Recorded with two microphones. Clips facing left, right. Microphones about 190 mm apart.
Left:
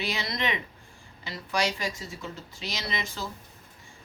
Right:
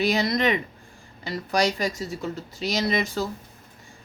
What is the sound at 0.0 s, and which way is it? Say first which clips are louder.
Speech: right 9 dB; 40° right (ahead or behind).